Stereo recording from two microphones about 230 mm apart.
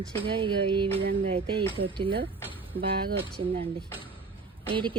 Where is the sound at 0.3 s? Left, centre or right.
Right.